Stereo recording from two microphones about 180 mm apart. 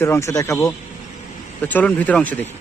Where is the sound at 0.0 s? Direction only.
15° left (ahead or behind).